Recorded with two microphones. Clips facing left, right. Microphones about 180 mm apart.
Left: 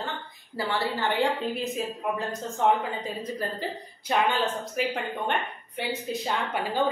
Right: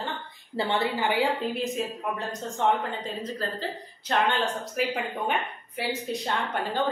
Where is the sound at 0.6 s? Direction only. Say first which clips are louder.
Right 2 dB; 25° right (ahead or behind).